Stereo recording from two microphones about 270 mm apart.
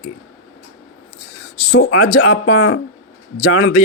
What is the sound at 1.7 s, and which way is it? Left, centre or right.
Speech, left.